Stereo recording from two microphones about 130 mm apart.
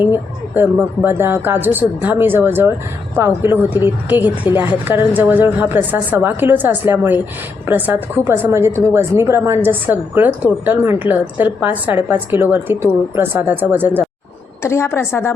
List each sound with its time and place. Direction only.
0.0 s a woman's voice: 15° right (ahead or behind)
14.6 s a woman's voice: 20° left (ahead or behind)